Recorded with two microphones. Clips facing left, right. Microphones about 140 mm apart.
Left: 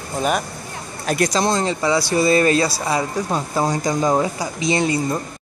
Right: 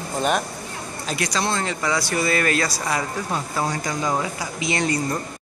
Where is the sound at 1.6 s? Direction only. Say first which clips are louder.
Left 5 dB; 25° left (ahead or behind).